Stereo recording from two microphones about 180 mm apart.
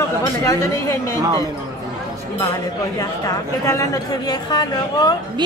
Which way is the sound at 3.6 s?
15° left (ahead or behind).